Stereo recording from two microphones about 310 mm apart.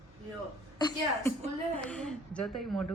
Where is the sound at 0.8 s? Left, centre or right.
Centre.